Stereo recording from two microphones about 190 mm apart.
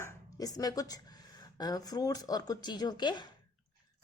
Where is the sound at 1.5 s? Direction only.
20° left (ahead or behind).